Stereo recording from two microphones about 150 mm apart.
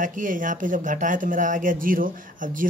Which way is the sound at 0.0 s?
60° right (ahead or behind).